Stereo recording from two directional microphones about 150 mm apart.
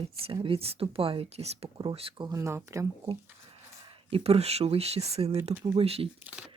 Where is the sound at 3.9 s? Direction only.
40° right (ahead or behind).